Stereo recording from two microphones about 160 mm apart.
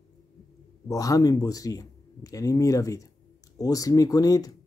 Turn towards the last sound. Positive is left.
turn(degrees=20)  # may be behind; listen again after turning